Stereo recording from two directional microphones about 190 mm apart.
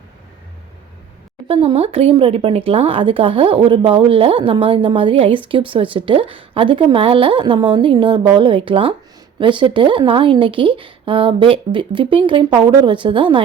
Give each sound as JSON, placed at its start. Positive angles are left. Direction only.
{"t": 1.5, "sound": "a woman's voice", "side_deg": -30}